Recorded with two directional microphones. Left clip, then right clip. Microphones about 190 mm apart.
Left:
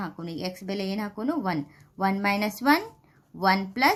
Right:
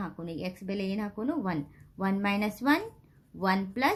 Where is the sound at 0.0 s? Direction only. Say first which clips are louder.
Left 3 dB; 25° left (ahead or behind).